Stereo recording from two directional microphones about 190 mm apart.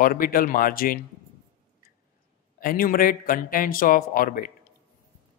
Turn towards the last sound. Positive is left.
turn(degrees=50)  # may be behind; listen again after turning